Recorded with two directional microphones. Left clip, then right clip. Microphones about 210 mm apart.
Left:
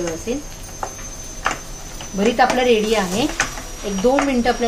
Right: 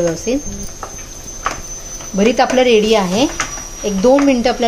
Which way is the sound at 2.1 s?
50° right (ahead or behind).